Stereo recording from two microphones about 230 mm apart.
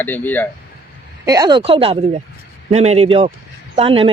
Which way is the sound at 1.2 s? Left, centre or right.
Centre.